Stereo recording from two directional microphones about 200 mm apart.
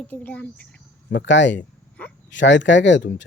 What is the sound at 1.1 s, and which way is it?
Speech, 65° left (ahead or behind).